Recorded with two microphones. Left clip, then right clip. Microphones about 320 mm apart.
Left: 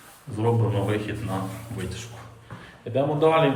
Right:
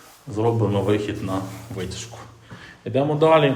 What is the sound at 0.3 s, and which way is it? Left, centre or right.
A man's voice, centre.